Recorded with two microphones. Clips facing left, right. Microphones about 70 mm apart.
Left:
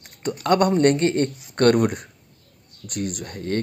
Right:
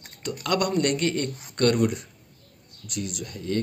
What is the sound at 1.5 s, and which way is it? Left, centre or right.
Speech, left.